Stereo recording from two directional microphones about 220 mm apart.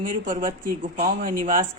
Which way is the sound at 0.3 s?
40° right (ahead or behind).